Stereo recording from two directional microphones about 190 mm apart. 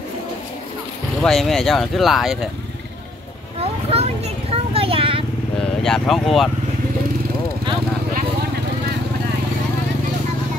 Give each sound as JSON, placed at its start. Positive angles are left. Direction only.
{"t": 1.2, "sound": "speech", "side_deg": 0}
{"t": 3.9, "sound": "a sound", "side_deg": -30}
{"t": 5.6, "sound": "speech", "side_deg": 5}